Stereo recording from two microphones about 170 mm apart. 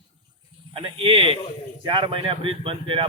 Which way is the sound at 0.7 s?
30° right (ahead or behind).